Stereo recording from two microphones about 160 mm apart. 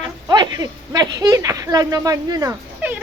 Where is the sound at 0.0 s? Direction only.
25° right (ahead or behind).